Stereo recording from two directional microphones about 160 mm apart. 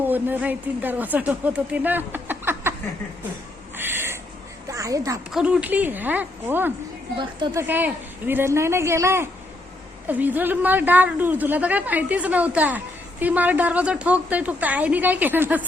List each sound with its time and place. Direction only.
0.0 s speech: 10° right (ahead or behind)
3.8 s a sound: 15° right (ahead or behind)
4.7 s speech: 20° right (ahead or behind)
5.3 s a woman's voice: 5° right (ahead or behind)